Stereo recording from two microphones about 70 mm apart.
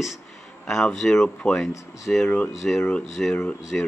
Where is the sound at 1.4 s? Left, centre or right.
Centre.